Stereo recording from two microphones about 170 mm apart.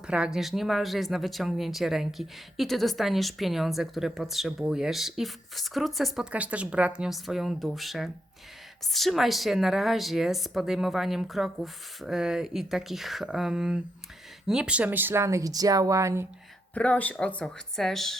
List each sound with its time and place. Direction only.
0.1 s speech: 5° right (ahead or behind)
16.7 s speech: 10° left (ahead or behind)